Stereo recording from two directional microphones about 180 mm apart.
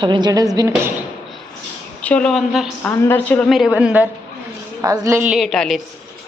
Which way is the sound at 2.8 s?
10° left (ahead or behind).